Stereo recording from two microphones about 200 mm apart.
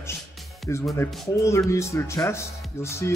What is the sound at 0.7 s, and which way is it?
Speech, 15° left (ahead or behind).